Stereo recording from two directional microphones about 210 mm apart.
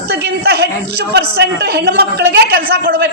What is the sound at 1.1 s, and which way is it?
A man's voice, 50° right (ahead or behind).